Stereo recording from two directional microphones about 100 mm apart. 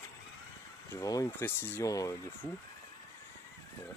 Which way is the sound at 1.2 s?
25° left (ahead or behind).